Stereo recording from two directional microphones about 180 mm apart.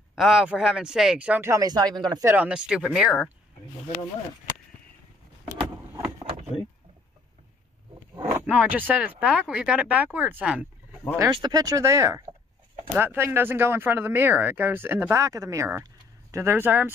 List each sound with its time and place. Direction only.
0.1 s speech: 5° right (ahead or behind)
8.2 s a sound: 10° right (ahead or behind)
8.5 s speech: 10° right (ahead or behind)
11.1 s speech: 20° right (ahead or behind)